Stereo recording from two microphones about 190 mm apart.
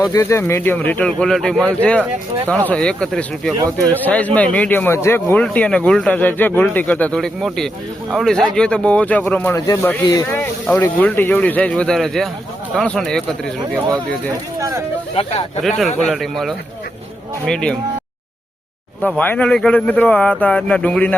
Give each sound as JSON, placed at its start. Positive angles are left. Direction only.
{"t": 0.0, "sound": "speech", "side_deg": 15}
{"t": 14.6, "sound": "speech", "side_deg": -15}
{"t": 15.1, "sound": "speech", "side_deg": 30}
{"t": 16.1, "sound": "speech", "side_deg": 0}
{"t": 19.2, "sound": "speech", "side_deg": 10}